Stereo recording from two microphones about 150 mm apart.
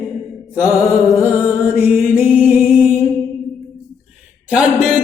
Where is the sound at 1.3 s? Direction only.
10° right (ahead or behind).